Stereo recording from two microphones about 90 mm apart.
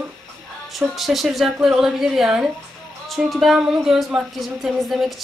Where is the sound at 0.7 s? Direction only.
Centre (ahead or behind).